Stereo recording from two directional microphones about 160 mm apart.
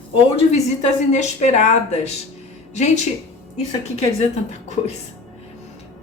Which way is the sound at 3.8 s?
45° left (ahead or behind).